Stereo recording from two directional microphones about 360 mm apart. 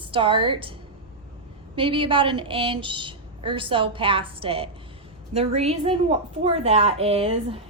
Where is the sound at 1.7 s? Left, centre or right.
Centre.